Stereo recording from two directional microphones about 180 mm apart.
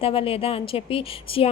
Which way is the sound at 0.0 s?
30° left (ahead or behind).